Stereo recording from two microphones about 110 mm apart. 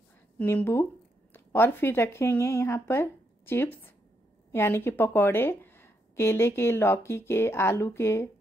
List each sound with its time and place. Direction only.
0.5 s a woman's voice: 20° left (ahead or behind)